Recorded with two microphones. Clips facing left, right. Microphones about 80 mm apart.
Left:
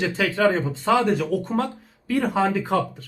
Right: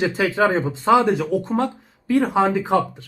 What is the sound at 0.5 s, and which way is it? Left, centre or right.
Speech, right.